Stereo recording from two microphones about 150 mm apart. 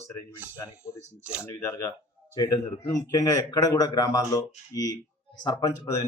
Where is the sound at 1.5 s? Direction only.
20° left (ahead or behind).